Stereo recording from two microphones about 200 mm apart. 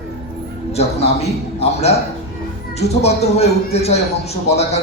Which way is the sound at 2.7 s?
30° left (ahead or behind).